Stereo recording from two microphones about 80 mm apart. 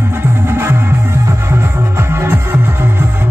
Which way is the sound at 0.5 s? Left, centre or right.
Right.